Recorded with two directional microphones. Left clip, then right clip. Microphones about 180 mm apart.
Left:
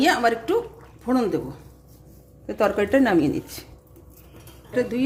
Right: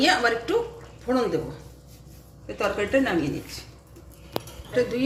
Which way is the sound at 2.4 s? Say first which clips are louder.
Left 5 dB; 80° left.